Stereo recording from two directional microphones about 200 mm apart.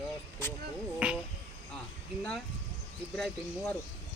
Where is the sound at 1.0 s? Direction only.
5° right (ahead or behind).